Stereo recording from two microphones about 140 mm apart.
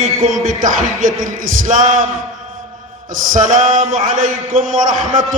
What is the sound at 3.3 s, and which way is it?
Speech, 70° right (ahead or behind).